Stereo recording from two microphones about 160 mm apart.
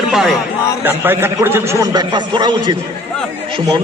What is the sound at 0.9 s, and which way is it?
A man's voice, 15° right (ahead or behind).